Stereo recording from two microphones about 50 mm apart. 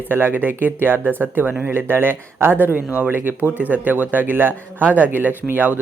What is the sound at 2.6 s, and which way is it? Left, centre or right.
Speech, right.